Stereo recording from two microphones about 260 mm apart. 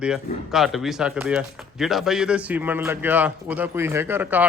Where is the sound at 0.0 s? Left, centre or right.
Centre.